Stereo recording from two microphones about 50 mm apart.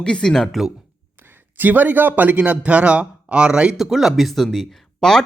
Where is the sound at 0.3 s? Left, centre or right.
Centre.